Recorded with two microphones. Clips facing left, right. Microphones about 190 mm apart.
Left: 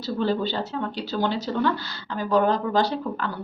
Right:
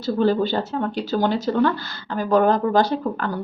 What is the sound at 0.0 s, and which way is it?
A woman's voice, 50° right (ahead or behind).